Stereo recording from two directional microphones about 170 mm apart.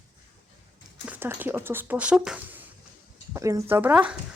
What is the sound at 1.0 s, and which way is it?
Speech, 10° right (ahead or behind).